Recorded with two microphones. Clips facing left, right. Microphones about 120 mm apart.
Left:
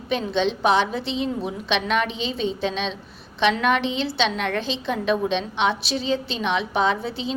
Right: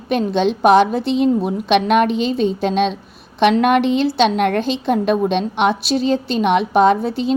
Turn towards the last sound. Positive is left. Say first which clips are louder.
# right 9 dB
turn(degrees=-45)  # may be behind; listen again after turning